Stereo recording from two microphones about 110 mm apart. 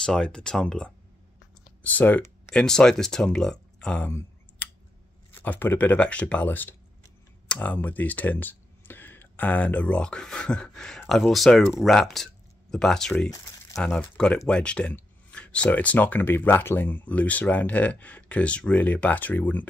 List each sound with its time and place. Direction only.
0.0 s speech: 5° left (ahead or behind)
4.6 s scissors: 10° left (ahead or behind)
5.3 s speech: 15° left (ahead or behind)